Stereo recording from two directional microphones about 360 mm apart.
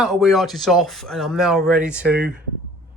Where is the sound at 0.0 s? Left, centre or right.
Centre.